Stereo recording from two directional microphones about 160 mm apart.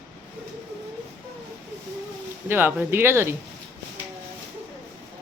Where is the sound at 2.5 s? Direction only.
15° right (ahead or behind).